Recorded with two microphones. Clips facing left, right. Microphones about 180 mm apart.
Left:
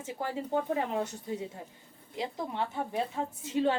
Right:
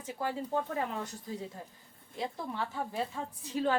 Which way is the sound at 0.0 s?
25° left (ahead or behind).